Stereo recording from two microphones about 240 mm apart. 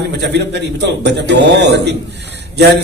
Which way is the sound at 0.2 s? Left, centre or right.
Right.